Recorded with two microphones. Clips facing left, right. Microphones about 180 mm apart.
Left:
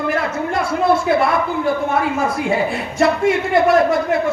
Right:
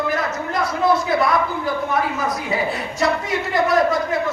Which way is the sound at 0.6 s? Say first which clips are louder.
Left 2 dB; 25° left (ahead or behind).